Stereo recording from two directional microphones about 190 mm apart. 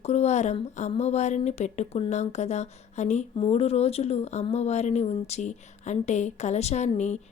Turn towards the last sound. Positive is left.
turn(degrees=35)  # may be behind; listen again after turning